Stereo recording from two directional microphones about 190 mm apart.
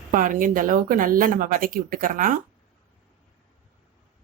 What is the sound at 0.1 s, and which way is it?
A woman's voice, 45° right (ahead or behind).